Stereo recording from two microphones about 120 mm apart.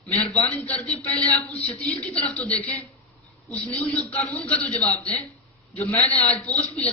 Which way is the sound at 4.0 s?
10° left (ahead or behind).